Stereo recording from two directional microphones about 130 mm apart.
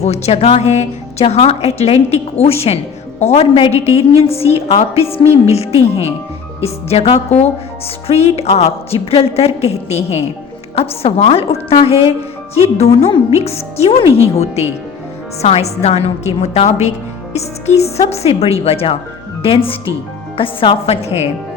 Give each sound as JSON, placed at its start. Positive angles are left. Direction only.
{"t": 0.0, "sound": "a woman's voice", "side_deg": 55}
{"t": 8.0, "sound": "a woman's voice", "side_deg": 55}